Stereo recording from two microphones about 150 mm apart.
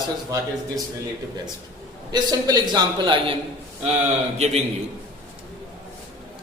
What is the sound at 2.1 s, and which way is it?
A man's voice, 25° right (ahead or behind).